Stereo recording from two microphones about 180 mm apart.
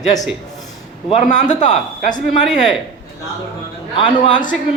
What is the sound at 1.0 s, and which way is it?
Speech, 45° left (ahead or behind).